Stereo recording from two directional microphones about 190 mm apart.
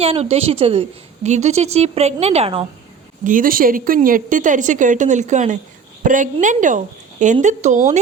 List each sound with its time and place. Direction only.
0.0 s a woman's voice: 30° right (ahead or behind)
3.2 s a woman's voice: 45° right (ahead or behind)